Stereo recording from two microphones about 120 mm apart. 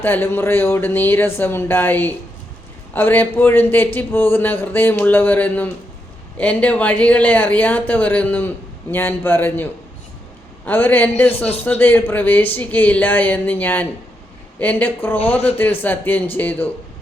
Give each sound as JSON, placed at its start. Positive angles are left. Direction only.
{"t": 0.0, "sound": "speech", "side_deg": 15}
{"t": 10.7, "sound": "speech", "side_deg": 15}